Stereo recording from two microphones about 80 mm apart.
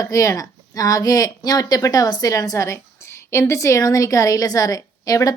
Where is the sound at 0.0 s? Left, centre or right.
Left.